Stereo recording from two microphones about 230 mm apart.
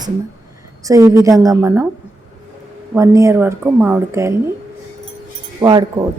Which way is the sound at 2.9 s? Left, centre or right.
Centre.